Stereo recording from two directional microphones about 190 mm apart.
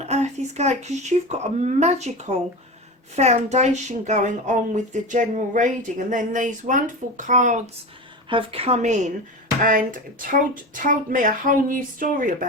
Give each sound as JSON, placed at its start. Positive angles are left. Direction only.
{"t": 0.0, "sound": "speech", "side_deg": -35}
{"t": 8.3, "sound": "speech", "side_deg": -30}